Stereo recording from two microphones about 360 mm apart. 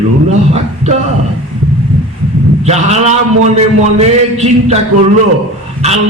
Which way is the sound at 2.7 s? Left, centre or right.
Centre.